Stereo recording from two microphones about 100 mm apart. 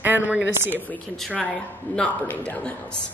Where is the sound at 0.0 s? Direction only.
15° right (ahead or behind).